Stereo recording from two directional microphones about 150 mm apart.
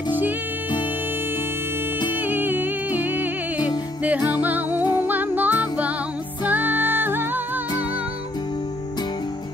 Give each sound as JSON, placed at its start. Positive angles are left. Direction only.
{"t": 2.1, "sound": "music", "side_deg": -10}
{"t": 3.5, "sound": "music", "side_deg": 25}
{"t": 4.0, "sound": "music", "side_deg": -10}